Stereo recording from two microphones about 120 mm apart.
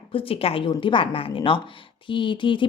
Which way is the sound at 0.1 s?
50° left (ahead or behind).